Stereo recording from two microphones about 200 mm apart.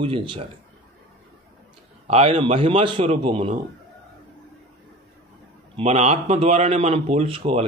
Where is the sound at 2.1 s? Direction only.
30° right (ahead or behind).